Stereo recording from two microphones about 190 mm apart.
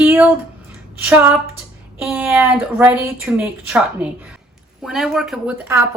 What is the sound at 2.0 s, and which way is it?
Speech, 10° right (ahead or behind).